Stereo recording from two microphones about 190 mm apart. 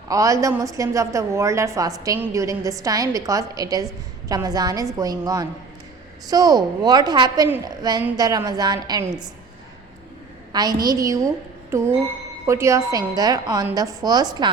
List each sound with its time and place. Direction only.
0.1 s a woman's voice: 15° right (ahead or behind)
10.5 s a woman's voice: 20° right (ahead or behind)